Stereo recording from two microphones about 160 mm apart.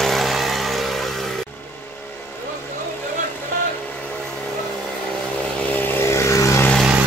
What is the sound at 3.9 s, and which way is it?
Vehicle, 5° left (ahead or behind).